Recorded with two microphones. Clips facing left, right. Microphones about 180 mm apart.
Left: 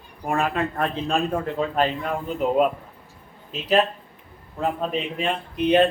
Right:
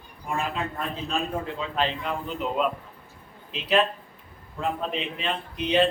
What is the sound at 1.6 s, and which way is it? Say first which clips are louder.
A man's voice: left 6 dB; 45° left (ahead or behind).